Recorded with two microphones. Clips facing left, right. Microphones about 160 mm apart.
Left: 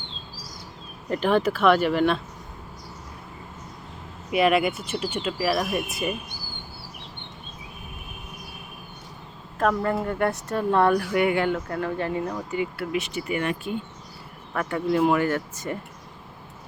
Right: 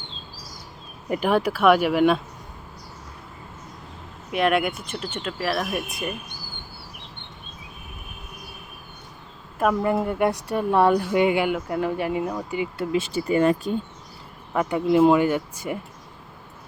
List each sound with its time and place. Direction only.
1.1 s speech: 10° right (ahead or behind)
4.3 s speech: 5° left (ahead or behind)
9.6 s speech: 10° right (ahead or behind); by 13.7 s 35° right (ahead or behind)
14.5 s speech: 20° right (ahead or behind)